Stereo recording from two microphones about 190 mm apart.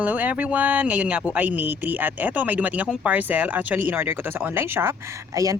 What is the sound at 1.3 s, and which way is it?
Speech, 10° right (ahead or behind).